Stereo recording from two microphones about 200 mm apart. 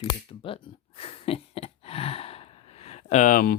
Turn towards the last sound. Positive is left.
turn(degrees=40)  # may be behind; listen again after turning